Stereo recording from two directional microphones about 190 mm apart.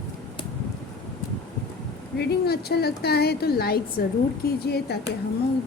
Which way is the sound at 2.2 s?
55° left (ahead or behind).